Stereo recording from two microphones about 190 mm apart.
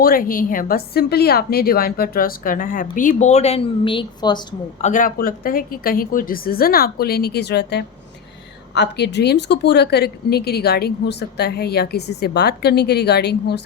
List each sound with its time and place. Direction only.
0.0 s a woman's voice: 50° left (ahead or behind); by 4.4 s 25° left (ahead or behind)
4.8 s a woman's voice: 45° left (ahead or behind); by 13.6 s 60° left (ahead or behind)